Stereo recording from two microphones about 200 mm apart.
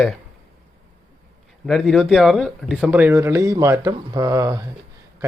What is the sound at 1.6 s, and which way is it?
Speech, centre (ahead or behind).